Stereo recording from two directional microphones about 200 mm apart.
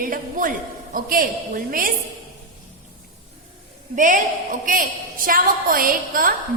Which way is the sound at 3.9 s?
40° right (ahead or behind).